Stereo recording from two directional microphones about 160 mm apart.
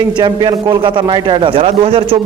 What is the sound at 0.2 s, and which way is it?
Speech, 30° right (ahead or behind).